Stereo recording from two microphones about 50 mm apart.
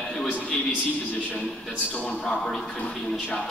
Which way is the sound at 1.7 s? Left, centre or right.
Left.